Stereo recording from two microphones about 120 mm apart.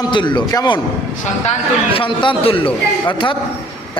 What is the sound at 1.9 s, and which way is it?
A man's voice, 45° left (ahead or behind).